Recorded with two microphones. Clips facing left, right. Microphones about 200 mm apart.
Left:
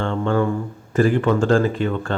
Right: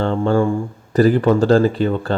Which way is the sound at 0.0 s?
35° right (ahead or behind).